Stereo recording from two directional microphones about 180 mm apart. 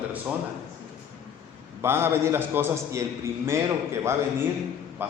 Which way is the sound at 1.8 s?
15° right (ahead or behind).